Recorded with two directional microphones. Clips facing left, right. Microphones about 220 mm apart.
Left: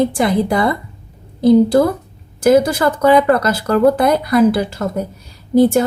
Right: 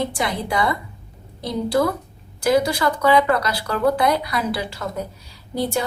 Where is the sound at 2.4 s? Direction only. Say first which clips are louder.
Left 7 dB; 50° left (ahead or behind).